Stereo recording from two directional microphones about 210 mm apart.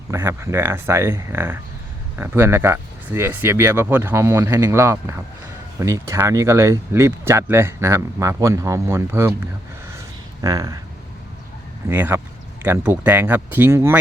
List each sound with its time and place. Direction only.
0.1 s speech: 15° right (ahead or behind)
10.4 s speech: 15° right (ahead or behind)
11.9 s speech: 10° right (ahead or behind)